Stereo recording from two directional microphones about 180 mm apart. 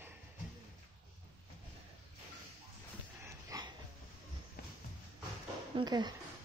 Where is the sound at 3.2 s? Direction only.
20° right (ahead or behind).